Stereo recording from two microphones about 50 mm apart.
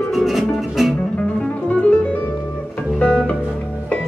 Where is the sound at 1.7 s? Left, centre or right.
Left.